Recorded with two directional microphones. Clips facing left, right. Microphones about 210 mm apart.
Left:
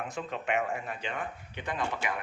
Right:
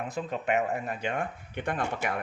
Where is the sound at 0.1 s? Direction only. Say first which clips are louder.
Right 4 dB; 40° right (ahead or behind).